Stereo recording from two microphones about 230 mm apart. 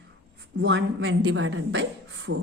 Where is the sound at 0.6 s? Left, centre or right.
Right.